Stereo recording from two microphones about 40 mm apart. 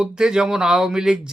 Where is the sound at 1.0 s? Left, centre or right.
Right.